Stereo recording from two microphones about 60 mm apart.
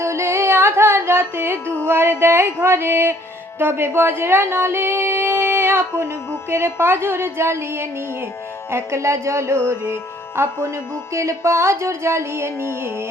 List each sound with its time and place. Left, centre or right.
0.0 s music: right
1.9 s speech: right
2.2 s music: right
2.6 s speech: right
6.5 s music: right
11.1 s music: right